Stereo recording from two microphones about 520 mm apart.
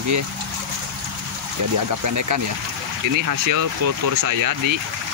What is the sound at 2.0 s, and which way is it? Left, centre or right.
Speech, right.